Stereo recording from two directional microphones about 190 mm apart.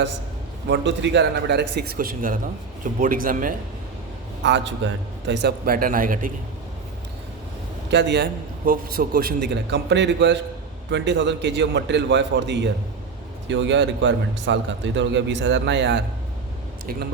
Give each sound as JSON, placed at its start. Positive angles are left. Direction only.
{"t": 0.7, "sound": "a man's voice", "side_deg": -65}
{"t": 4.4, "sound": "a man's voice", "side_deg": -70}
{"t": 7.9, "sound": "a man's voice", "side_deg": -65}
{"t": 16.8, "sound": "speech", "side_deg": -50}